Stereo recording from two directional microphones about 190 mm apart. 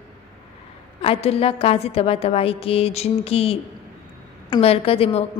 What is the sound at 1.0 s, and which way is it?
A woman's voice, 30° left (ahead or behind).